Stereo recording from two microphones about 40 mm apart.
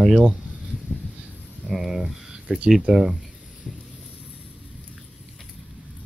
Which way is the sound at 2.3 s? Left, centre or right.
Right.